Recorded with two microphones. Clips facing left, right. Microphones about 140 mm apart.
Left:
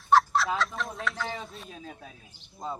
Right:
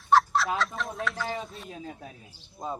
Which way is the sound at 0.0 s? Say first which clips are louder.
Even; centre (ahead or behind).